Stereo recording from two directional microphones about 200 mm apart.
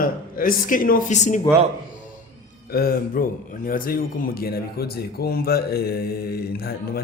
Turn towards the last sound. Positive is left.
turn(degrees=50)  # may be behind; listen again after turning